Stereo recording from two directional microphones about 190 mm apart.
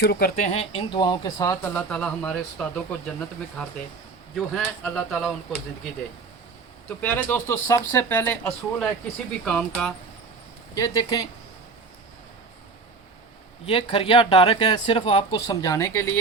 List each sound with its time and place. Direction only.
0.0 s speech: 60° left (ahead or behind)
0.3 s speech: 35° left (ahead or behind); by 1.7 s 20° left (ahead or behind)
1.7 s speech: 5° left (ahead or behind)
10.8 s speech: 20° left (ahead or behind)
13.7 s speech: 25° left (ahead or behind)